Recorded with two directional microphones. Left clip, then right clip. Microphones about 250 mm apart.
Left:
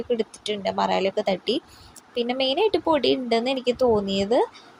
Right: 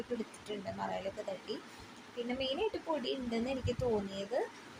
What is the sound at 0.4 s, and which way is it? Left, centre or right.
Speech, left.